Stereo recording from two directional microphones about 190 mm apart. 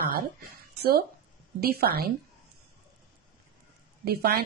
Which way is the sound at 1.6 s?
55° right (ahead or behind).